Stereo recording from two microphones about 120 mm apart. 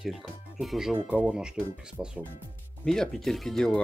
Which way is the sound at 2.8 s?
5° left (ahead or behind).